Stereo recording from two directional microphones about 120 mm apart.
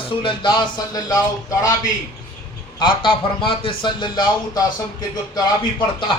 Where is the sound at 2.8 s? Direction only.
45° left (ahead or behind).